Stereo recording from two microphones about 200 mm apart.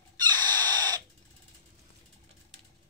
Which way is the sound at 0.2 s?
20° right (ahead or behind).